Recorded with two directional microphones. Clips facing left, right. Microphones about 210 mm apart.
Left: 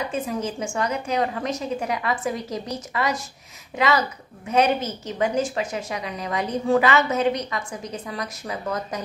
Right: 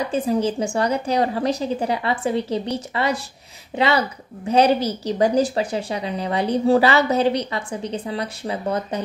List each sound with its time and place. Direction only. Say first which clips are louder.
0.1 s speech: right 6 dB; 35° right (ahead or behind)